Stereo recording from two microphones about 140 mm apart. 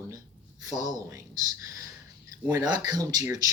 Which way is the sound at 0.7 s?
25° right (ahead or behind).